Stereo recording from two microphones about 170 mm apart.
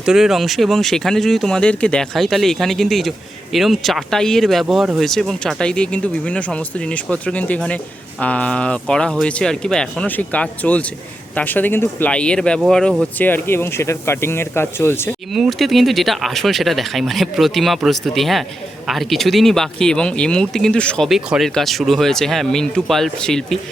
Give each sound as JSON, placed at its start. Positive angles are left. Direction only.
{"t": 0.0, "sound": "speech", "side_deg": -5}
{"t": 15.3, "sound": "speech", "side_deg": 0}